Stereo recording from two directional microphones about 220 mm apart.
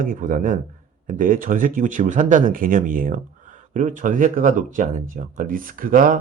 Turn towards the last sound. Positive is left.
turn(degrees=-40)  # may be behind; listen again after turning